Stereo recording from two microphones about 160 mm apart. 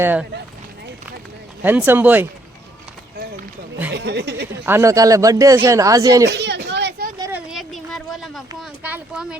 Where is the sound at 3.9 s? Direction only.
90° right.